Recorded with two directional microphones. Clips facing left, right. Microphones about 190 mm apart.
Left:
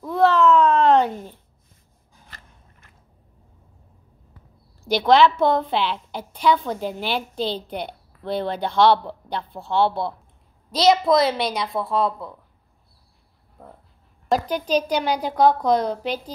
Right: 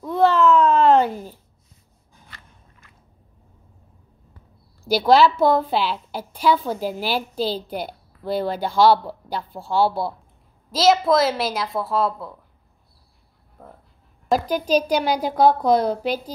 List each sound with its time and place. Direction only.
0.0 s babbling: centre (ahead or behind)
4.8 s a woman's voice: 5° right (ahead or behind)
14.3 s speech: 10° right (ahead or behind)